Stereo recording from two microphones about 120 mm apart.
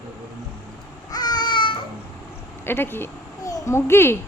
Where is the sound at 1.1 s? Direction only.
35° left (ahead or behind).